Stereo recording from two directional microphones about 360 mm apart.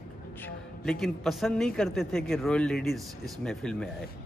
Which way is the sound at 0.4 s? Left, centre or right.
Centre.